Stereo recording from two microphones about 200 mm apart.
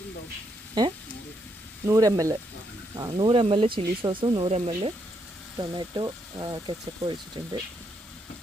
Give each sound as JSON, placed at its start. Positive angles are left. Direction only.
{"t": 0.8, "sound": "speech", "side_deg": -20}